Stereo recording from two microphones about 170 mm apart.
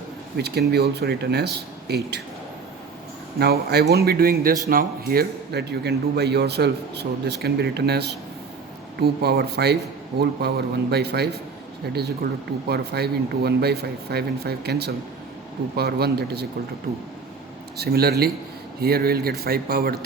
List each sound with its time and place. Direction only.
0.3 s a man's voice: 70° right (ahead or behind)
3.3 s a man's voice: 65° right (ahead or behind)
17.7 s a man's voice: 65° right (ahead or behind)